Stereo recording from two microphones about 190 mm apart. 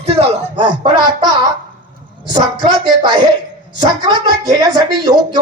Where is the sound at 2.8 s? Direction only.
20° right (ahead or behind).